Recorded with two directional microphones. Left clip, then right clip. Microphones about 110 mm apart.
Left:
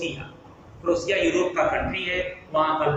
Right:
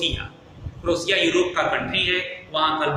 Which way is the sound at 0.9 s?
35° right (ahead or behind).